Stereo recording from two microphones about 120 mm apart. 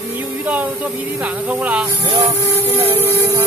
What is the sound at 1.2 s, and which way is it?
Speech, 10° right (ahead or behind).